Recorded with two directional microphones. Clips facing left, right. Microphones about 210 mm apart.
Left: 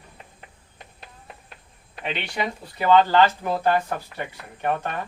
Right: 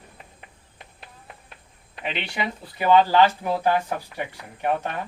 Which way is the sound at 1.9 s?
5° right (ahead or behind).